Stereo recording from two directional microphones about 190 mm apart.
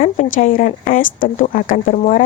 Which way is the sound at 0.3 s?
40° left (ahead or behind).